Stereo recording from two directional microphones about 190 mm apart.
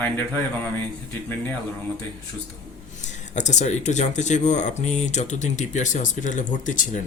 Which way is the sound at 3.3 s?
40° left (ahead or behind).